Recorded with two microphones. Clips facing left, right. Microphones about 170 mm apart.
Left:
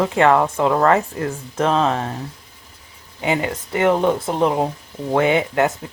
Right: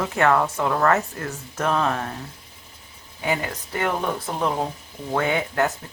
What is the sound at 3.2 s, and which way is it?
Speech, 25° left (ahead or behind).